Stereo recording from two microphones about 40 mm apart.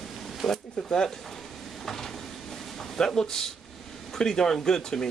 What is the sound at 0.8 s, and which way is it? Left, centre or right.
Speech, centre.